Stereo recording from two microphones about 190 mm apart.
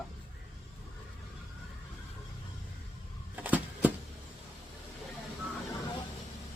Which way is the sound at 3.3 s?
10° right (ahead or behind).